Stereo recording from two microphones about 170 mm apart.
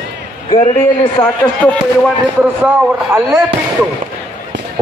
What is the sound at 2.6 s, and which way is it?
Speech, 15° right (ahead or behind).